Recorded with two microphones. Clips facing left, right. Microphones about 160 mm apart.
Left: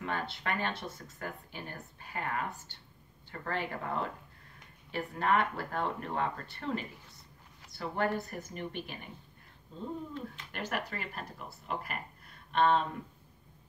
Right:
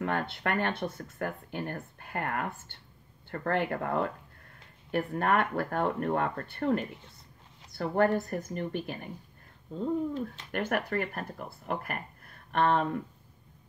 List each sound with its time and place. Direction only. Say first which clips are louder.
0.0 s speech: right 5 dB; 55° right (ahead or behind)
7.7 s a woman's voice: right 7 dB; 50° right (ahead or behind)
10.5 s speech: right 7 dB; 55° right (ahead or behind)